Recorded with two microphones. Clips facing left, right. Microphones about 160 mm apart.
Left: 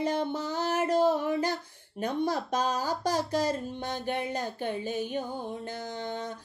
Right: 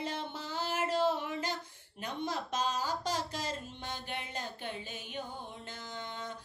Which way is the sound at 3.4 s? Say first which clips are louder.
Left 9 dB; 40° left (ahead or behind).